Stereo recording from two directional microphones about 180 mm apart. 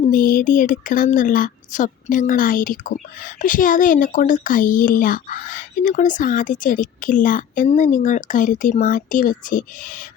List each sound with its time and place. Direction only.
0.1 s speech: 50° left (ahead or behind)